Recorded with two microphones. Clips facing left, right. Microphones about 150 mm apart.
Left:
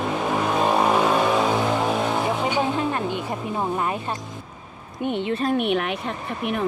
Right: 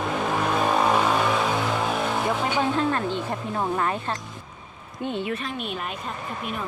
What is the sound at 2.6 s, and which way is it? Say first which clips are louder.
Speech: even; 15° left (ahead or behind).